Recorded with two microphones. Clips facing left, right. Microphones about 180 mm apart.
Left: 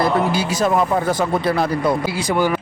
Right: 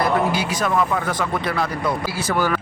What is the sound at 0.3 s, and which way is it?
Speech, 30° left (ahead or behind).